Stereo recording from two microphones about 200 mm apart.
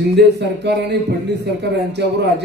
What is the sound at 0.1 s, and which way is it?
A man's voice, 60° right (ahead or behind).